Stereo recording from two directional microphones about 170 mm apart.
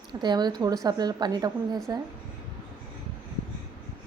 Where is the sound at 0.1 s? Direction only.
25° right (ahead or behind).